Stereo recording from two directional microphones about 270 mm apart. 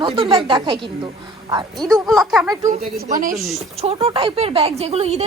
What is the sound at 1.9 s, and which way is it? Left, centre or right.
Speech, centre.